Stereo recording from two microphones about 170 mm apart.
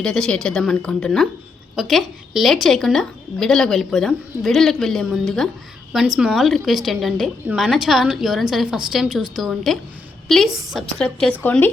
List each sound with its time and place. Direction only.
0.0 s a woman's voice: 5° left (ahead or behind)
10.5 s a woman's voice: 20° right (ahead or behind)
10.8 s a woman's voice: 5° left (ahead or behind)